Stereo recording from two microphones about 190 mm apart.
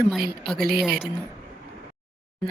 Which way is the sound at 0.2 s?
55° right (ahead or behind).